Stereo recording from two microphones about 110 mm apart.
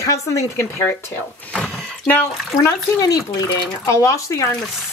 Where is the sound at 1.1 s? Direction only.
10° left (ahead or behind).